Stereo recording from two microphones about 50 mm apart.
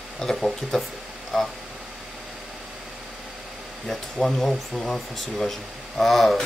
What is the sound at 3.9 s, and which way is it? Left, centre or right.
Speech, centre.